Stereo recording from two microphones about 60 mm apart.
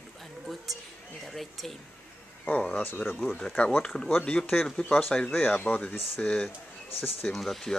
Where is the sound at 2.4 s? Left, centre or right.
Centre.